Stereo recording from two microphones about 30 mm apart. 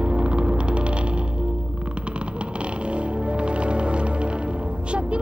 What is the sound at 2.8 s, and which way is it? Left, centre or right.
Music, right.